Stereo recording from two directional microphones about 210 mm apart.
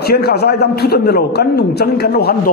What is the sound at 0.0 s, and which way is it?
A man's voice, 50° left (ahead or behind).